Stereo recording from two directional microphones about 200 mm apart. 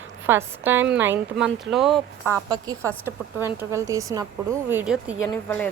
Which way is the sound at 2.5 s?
15° right (ahead or behind).